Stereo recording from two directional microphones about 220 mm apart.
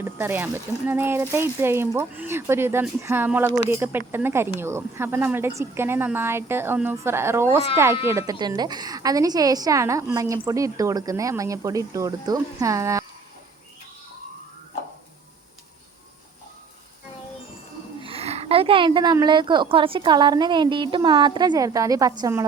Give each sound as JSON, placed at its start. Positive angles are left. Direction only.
{"t": 0.0, "sound": "a woman's voice", "side_deg": -10}
{"t": 18.0, "sound": "a woman's voice", "side_deg": -25}